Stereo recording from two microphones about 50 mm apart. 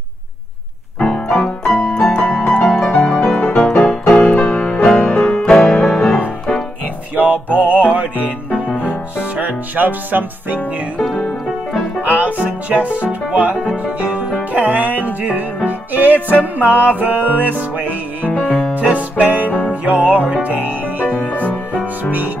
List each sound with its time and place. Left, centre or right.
0.9 s piano: centre
3.3 s music: centre
5.1 s music: centre
7.2 s music: right
9.4 s music: right
11.0 s speech: centre
12.0 s music: right
14.5 s music: right
18.5 s music: left
18.8 s music: right
20.4 s speech: right
21.2 s music: left